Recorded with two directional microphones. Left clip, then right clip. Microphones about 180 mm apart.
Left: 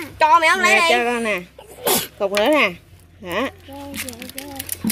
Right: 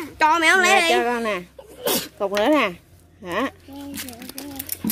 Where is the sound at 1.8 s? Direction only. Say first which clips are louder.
Left 3 dB; 20° left (ahead or behind).